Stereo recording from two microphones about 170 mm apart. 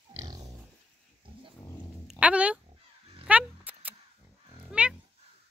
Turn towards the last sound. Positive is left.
turn(degrees=-5)  # may be behind; listen again after turning